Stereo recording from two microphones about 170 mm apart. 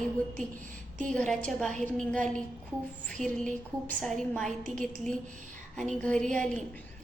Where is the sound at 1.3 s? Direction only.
5° left (ahead or behind).